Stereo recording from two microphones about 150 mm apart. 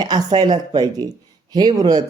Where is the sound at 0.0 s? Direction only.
25° right (ahead or behind).